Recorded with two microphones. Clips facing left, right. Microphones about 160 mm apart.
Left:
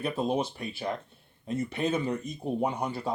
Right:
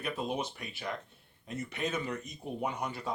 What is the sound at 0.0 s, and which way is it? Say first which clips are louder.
Speech: left 6 dB; 30° left (ahead or behind).